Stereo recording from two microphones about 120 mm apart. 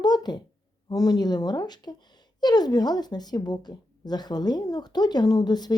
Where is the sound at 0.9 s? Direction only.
30° left (ahead or behind).